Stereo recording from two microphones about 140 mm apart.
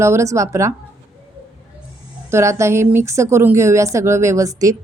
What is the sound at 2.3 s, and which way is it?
Speech, 20° right (ahead or behind).